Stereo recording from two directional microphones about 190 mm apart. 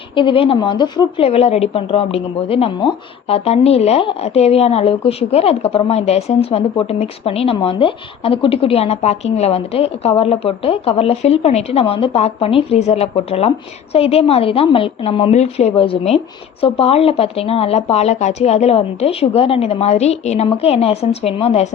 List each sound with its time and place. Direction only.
0.2 s speech: 25° left (ahead or behind)